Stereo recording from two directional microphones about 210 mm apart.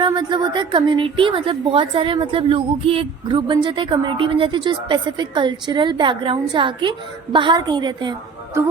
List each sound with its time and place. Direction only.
0.0 s a woman's voice: 20° right (ahead or behind)